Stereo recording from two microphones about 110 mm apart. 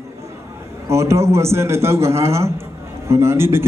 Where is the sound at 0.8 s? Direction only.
25° right (ahead or behind).